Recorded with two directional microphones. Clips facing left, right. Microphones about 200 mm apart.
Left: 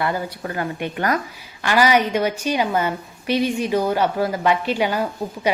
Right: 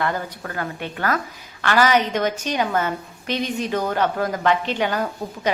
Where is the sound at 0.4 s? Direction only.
20° left (ahead or behind).